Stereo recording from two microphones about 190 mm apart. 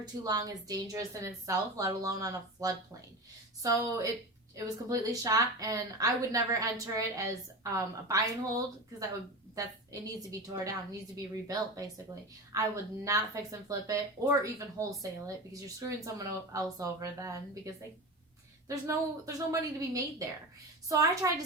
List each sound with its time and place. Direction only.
0.0 s a woman's voice: 20° right (ahead or behind)
12.5 s a woman's voice: 15° right (ahead or behind)
18.7 s a woman's voice: 15° right (ahead or behind)